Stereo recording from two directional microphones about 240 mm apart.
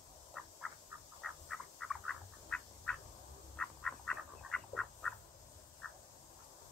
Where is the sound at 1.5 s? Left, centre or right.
Centre.